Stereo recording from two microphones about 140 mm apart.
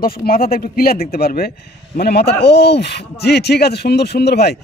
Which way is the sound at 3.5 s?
90° left.